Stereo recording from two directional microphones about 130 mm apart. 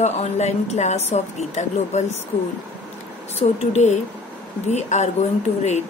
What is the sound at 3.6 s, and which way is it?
A woman's voice, 55° left (ahead or behind).